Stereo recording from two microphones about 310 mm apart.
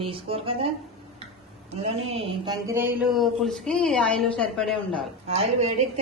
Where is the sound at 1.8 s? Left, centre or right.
Centre.